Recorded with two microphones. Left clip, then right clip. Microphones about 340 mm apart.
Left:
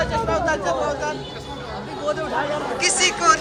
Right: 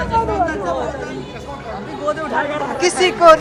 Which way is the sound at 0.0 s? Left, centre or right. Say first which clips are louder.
Right 4 dB; centre.